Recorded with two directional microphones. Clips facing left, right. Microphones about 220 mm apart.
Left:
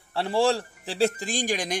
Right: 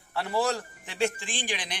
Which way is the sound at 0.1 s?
30° left (ahead or behind).